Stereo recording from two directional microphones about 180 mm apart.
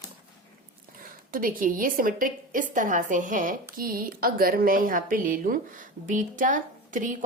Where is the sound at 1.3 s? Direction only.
50° right (ahead or behind).